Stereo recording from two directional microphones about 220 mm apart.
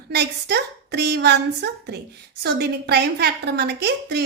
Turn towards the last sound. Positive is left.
turn(degrees=-50)  # may be behind; listen again after turning